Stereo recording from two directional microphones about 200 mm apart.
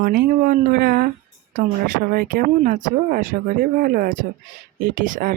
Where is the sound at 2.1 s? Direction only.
45° right (ahead or behind).